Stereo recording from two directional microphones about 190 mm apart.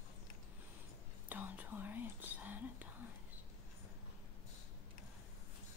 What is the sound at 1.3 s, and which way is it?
Speech, 10° right (ahead or behind).